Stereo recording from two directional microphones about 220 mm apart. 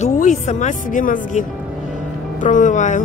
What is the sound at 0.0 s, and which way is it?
Speech, 35° left (ahead or behind).